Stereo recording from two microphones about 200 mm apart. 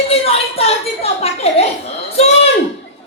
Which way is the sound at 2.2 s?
30° left (ahead or behind).